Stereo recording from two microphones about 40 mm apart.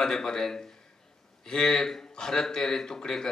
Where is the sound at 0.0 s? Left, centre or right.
Centre.